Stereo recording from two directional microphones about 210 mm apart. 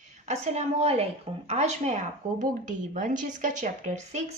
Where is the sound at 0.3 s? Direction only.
30° right (ahead or behind).